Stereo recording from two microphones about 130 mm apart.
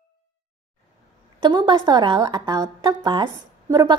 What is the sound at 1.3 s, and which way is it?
A woman's voice, 35° right (ahead or behind).